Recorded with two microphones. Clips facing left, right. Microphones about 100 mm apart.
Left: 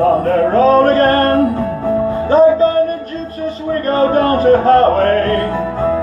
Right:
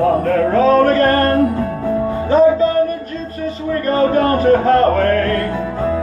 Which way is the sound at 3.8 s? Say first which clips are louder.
Left 1 dB; 35° left (ahead or behind).